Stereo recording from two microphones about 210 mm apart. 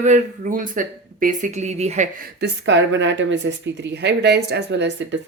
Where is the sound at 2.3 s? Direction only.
55° right (ahead or behind).